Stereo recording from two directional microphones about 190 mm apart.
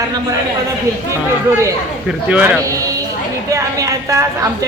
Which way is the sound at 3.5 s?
15° right (ahead or behind).